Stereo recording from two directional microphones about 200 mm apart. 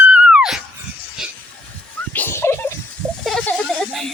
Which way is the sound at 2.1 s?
10° left (ahead or behind).